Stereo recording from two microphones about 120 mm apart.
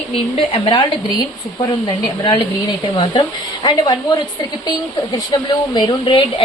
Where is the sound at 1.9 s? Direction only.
40° left (ahead or behind).